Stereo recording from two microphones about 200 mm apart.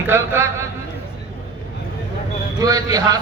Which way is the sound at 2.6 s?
20° right (ahead or behind).